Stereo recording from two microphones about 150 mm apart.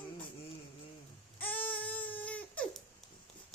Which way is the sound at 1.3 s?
10° left (ahead or behind).